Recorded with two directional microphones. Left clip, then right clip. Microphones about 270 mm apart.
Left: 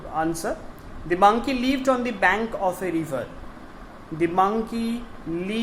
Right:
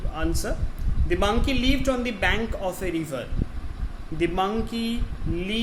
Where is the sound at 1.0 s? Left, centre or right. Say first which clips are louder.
Left 6 dB; right.